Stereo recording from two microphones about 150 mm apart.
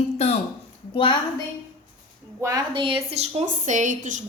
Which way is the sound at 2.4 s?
25° right (ahead or behind).